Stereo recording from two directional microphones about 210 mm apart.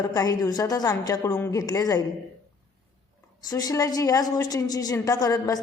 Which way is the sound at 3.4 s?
15° left (ahead or behind).